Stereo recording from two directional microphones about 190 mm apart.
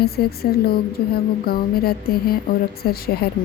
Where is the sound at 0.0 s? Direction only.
55° left (ahead or behind).